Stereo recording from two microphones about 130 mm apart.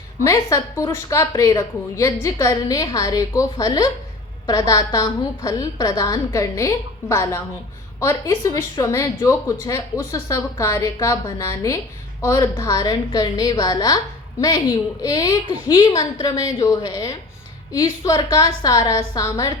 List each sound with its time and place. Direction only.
0.3 s a woman's voice: 25° left (ahead or behind)
15.0 s a woman's voice: 30° left (ahead or behind)